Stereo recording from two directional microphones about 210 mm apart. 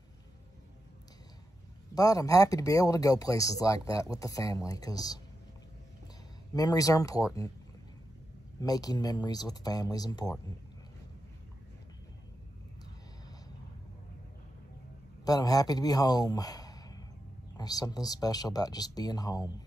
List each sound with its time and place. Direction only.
2.0 s speech: 15° left (ahead or behind)
6.5 s speech: 15° left (ahead or behind)
8.5 s speech: 15° left (ahead or behind)
15.2 s speech: 15° left (ahead or behind)